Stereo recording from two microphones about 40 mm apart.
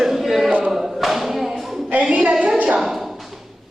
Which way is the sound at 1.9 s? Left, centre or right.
Right.